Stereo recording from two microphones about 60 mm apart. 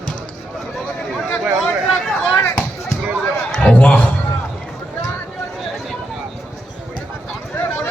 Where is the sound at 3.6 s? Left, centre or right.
Left.